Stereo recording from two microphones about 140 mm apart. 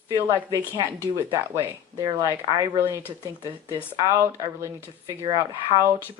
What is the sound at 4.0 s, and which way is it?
Speech, 20° right (ahead or behind).